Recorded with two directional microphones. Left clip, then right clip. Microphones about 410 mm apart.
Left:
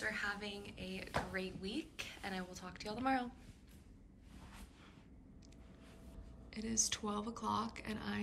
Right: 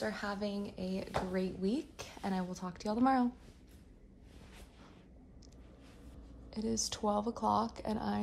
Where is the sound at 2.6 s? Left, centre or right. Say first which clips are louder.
Right 6 dB; left.